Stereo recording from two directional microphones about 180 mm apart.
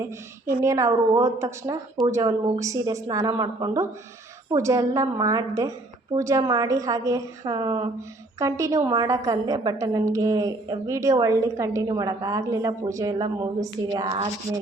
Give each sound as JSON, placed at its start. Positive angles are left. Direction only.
{"t": 0.6, "sound": "a woman's voice", "side_deg": -15}